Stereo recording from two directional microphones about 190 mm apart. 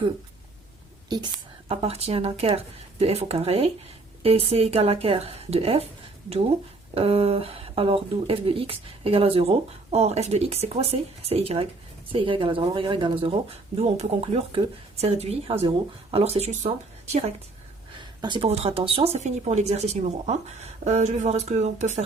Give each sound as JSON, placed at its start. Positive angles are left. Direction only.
{"t": 1.1, "sound": "speech", "side_deg": -25}
{"t": 6.9, "sound": "speech", "side_deg": -30}